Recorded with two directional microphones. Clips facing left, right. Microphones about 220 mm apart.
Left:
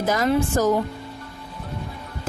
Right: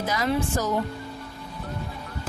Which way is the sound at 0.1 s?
50° left (ahead or behind).